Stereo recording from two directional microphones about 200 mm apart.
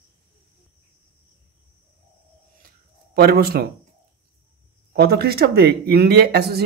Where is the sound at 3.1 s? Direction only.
50° right (ahead or behind).